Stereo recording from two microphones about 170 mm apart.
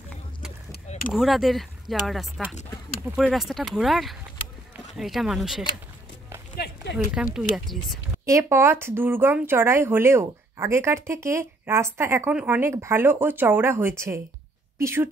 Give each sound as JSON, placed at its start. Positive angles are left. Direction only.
{"t": 1.1, "sound": "speech", "side_deg": 0}
{"t": 6.5, "sound": "a sound", "side_deg": 80}
{"t": 7.3, "sound": "speech", "side_deg": 0}
{"t": 8.3, "sound": "a woman's voice", "side_deg": -15}